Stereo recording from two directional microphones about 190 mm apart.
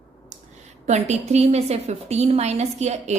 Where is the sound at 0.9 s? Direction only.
35° right (ahead or behind).